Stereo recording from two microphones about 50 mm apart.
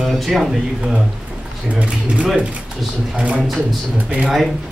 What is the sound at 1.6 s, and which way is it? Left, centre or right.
Speech, right.